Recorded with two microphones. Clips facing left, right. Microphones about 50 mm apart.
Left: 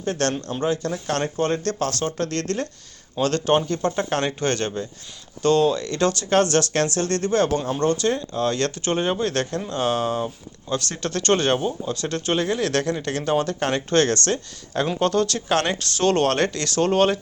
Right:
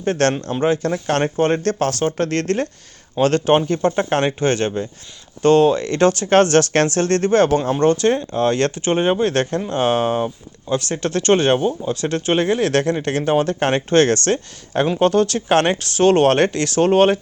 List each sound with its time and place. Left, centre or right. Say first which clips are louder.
0.0 s speech: right 6 dB; right
5.4 s speech: right 5 dB; right
10.7 s speech: right 5 dB; centre
12.4 s speech: right 6 dB; right
14.9 s speech: right 5 dB; centre
15.4 s speech: right 6 dB; right
16.0 s speech: right 6 dB; centre